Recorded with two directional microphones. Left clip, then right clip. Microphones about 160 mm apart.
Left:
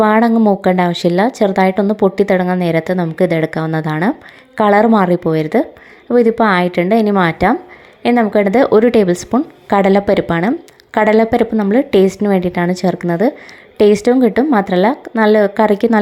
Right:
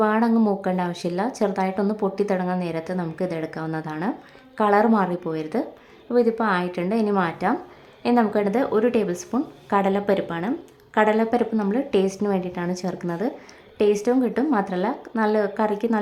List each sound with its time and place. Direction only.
0.0 s a woman's voice: 35° left (ahead or behind)